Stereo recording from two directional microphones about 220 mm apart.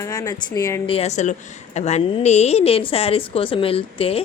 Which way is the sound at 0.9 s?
30° left (ahead or behind).